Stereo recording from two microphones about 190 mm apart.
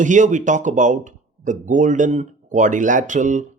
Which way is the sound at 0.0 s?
40° right (ahead or behind).